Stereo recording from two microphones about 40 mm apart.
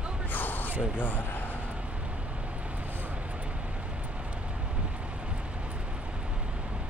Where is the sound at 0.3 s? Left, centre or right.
Left.